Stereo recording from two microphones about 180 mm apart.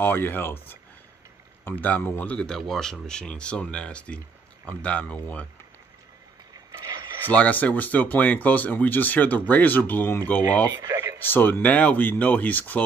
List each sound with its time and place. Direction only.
0.0 s speech: 10° left (ahead or behind)
6.5 s a sound: 20° right (ahead or behind)
7.2 s speech: 10° left (ahead or behind)
10.7 s speech: 20° right (ahead or behind)
11.1 s speech: 10° left (ahead or behind)